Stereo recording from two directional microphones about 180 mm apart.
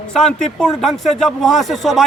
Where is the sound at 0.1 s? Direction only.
5° left (ahead or behind).